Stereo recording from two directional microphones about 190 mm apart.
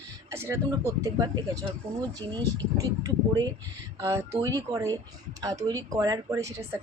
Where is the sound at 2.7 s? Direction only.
15° right (ahead or behind).